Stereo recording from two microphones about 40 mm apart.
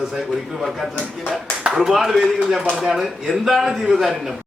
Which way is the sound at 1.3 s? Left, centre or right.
Right.